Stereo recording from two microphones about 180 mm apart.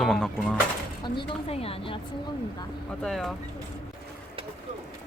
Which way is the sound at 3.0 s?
Centre (ahead or behind).